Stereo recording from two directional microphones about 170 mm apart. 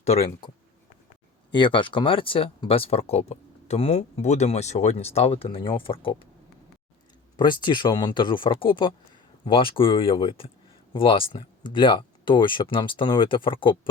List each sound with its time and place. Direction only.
0.0 s speech: 35° left (ahead or behind)
1.5 s speech: 30° left (ahead or behind)
7.3 s speech: 25° left (ahead or behind)